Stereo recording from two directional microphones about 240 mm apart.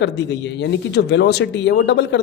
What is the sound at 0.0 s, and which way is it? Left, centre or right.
Speech, left.